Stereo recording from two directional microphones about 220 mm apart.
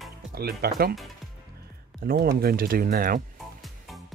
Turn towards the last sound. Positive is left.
turn(degrees=-40)  # may be behind; listen again after turning